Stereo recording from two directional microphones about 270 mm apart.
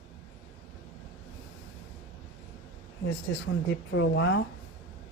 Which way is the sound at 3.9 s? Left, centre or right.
Left.